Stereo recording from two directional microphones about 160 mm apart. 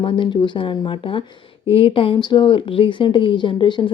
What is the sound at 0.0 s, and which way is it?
Speech, 30° left (ahead or behind).